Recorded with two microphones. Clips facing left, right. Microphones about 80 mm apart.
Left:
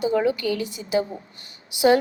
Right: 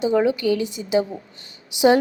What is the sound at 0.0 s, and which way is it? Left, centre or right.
A woman's voice, right.